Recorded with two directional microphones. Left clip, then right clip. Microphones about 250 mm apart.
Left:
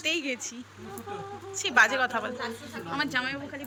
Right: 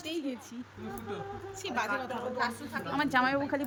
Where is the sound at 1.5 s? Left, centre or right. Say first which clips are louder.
Left 11 dB; centre.